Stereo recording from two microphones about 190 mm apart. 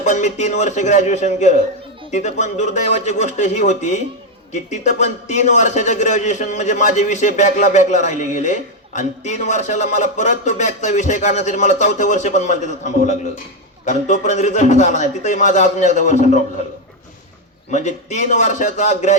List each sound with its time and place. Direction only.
0.0 s a man's voice: 40° left (ahead or behind)
17.7 s a man's voice: 40° left (ahead or behind)